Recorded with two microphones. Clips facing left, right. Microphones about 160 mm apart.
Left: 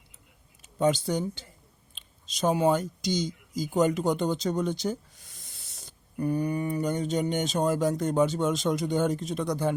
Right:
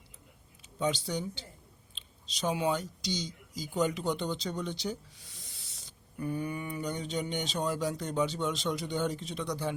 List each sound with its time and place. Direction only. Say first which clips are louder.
0.8 s speech: left 7 dB; 45° left (ahead or behind)